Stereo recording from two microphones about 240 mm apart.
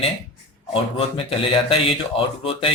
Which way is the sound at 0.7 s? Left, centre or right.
Left.